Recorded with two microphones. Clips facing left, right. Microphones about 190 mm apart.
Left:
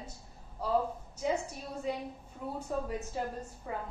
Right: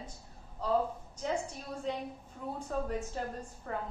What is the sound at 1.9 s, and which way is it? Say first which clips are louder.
A woman's voice: left 1 dB; 10° left (ahead or behind).